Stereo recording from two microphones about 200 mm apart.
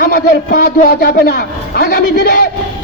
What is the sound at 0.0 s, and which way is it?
A man's voice, 45° left (ahead or behind).